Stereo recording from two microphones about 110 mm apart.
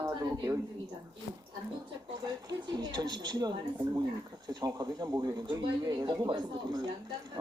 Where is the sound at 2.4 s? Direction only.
40° right (ahead or behind).